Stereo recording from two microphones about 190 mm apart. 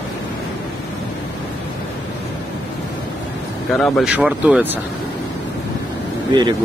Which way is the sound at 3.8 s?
Centre (ahead or behind).